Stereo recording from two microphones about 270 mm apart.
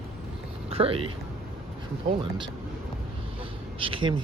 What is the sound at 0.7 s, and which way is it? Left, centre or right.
Speech, right.